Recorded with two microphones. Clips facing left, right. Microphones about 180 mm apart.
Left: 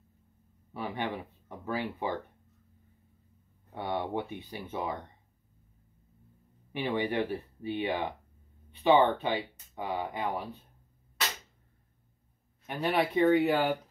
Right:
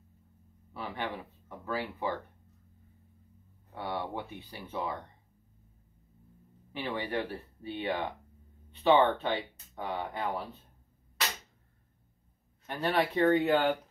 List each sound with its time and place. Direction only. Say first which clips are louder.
0.7 s speech: left 3 dB; 15° left (ahead or behind)
3.7 s speech: left 3 dB; 20° left (ahead or behind)
6.7 s speech: left 4 dB; 15° left (ahead or behind)
12.6 s speech: left 1 dB; 15° left (ahead or behind)